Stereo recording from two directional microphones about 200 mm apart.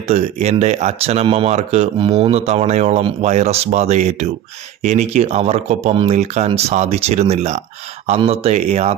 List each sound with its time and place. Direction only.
0.0 s speech: 35° right (ahead or behind)